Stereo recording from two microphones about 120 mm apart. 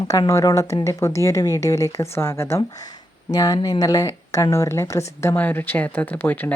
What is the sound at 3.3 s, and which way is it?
Speech, 30° left (ahead or behind).